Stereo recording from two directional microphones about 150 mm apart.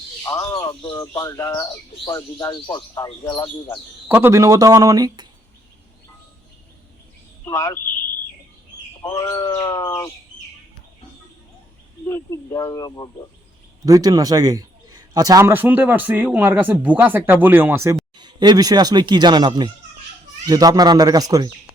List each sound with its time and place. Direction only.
0.2 s a sound: 20° left (ahead or behind)
1.1 s speech: 20° left (ahead or behind)
4.1 s speech: 20° right (ahead or behind)
7.4 s speech: 20° left (ahead or behind)
9.0 s speech: 25° left (ahead or behind)
12.0 s speech: 20° left (ahead or behind)
13.8 s a man's voice: 25° right (ahead or behind)
18.2 s speech: 30° right (ahead or behind)